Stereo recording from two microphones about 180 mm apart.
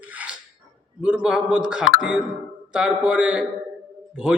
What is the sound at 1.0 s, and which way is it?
A man's voice, 5° right (ahead or behind).